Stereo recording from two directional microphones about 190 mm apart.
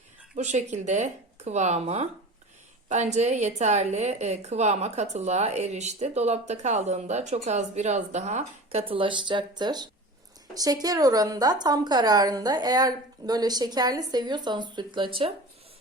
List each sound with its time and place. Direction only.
0.3 s a woman's voice: 40° right (ahead or behind)